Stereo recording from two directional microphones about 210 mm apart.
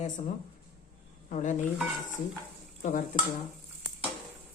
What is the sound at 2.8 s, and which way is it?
Speech, 35° left (ahead or behind).